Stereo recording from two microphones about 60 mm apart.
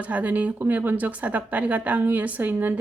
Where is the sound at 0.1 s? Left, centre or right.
Right.